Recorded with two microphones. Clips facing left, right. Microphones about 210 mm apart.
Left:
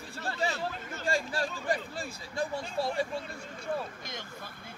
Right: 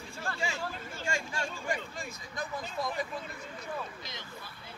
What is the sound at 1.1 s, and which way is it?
Speech, 35° left (ahead or behind).